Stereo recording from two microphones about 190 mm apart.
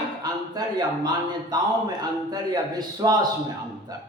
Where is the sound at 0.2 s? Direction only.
20° right (ahead or behind).